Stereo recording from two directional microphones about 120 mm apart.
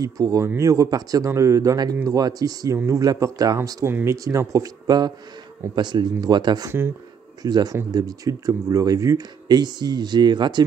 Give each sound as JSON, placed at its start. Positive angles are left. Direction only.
{"t": 0.0, "sound": "speech", "side_deg": -30}
{"t": 3.5, "sound": "speech", "side_deg": -20}